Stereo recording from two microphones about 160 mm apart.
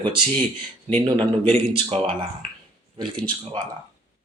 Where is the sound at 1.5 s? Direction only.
35° right (ahead or behind).